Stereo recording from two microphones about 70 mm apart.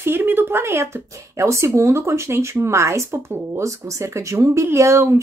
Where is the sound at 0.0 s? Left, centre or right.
Right.